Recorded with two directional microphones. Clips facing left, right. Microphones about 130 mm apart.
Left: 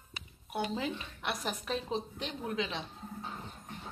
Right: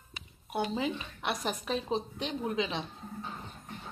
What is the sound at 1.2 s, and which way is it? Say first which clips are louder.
Speech: right 2 dB; 20° right (ahead or behind).